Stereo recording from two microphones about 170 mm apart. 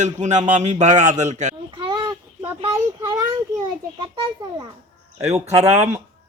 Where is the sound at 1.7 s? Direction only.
25° right (ahead or behind).